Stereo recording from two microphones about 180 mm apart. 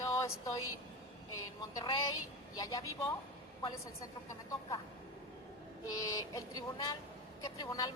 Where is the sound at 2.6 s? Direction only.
20° left (ahead or behind).